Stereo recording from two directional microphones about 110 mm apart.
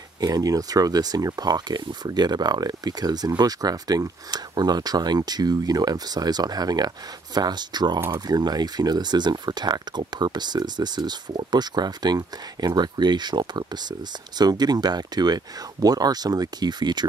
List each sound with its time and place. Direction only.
0.2 s speech: 35° right (ahead or behind)